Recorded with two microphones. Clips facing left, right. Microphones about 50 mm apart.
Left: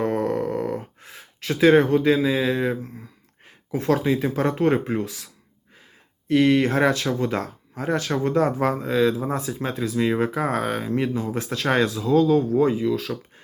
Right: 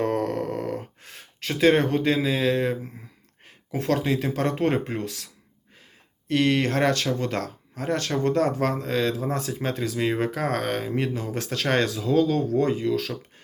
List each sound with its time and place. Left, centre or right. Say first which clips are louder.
0.0 s a sound: left 2 dB; centre
1.5 s speech: left 4 dB; centre
3.8 s speech: left 3 dB; centre
7.3 s speech: left 2 dB; centre